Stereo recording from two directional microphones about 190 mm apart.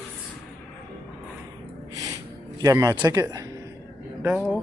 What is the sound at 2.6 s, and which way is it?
Speech, 20° right (ahead or behind).